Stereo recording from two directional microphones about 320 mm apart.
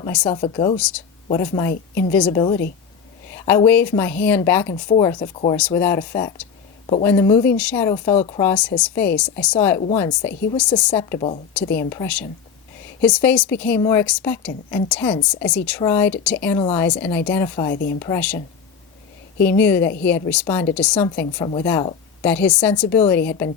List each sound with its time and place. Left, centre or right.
0.0 s speech: centre
0.3 s a woman's voice: centre
8.4 s a woman's voice: centre
11.6 s speech: left
11.9 s a woman's voice: centre
19.5 s a woman's voice: centre